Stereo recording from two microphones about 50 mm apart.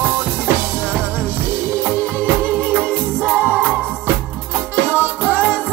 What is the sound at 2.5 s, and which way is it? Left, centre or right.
Music, right.